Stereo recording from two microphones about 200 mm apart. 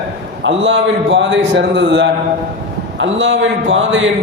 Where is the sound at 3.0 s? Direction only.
70° right (ahead or behind).